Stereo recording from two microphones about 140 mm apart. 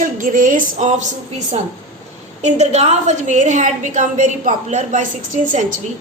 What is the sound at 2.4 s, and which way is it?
A woman's voice, 55° right (ahead or behind).